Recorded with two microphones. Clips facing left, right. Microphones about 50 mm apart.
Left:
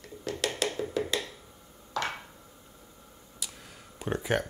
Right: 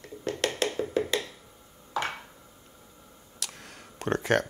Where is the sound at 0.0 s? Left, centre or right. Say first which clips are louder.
Right 3 dB; right.